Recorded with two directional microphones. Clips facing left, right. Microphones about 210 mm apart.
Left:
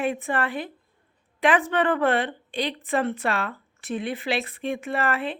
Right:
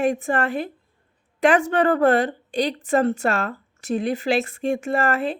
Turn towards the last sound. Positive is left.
turn(degrees=-40)  # may be behind; listen again after turning